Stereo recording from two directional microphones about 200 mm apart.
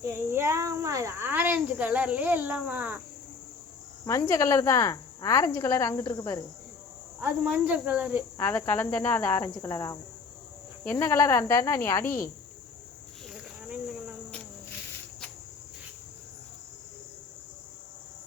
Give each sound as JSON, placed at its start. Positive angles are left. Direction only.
{"t": 0.0, "sound": "speech", "side_deg": -10}
{"t": 4.0, "sound": "a woman's voice", "side_deg": 15}
{"t": 7.2, "sound": "speech", "side_deg": -5}
{"t": 8.4, "sound": "a woman's voice", "side_deg": 10}